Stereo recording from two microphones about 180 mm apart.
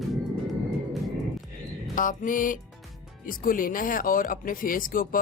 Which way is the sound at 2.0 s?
45° left (ahead or behind).